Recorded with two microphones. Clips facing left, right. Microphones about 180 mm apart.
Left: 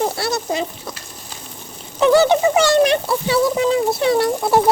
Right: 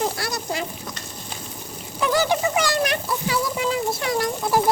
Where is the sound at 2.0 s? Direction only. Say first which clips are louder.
Left 8 dB; 25° left (ahead or behind).